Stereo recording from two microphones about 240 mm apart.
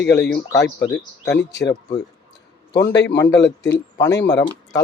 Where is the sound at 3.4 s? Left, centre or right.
Left.